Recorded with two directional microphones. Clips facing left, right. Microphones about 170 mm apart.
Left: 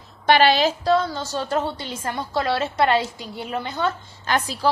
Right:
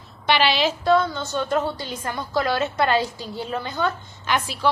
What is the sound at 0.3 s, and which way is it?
Speech, 45° left (ahead or behind).